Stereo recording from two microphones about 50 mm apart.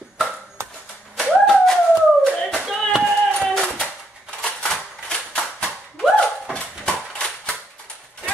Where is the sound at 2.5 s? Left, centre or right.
Centre.